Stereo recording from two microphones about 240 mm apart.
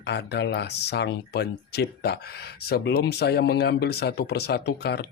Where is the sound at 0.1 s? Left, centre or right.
Left.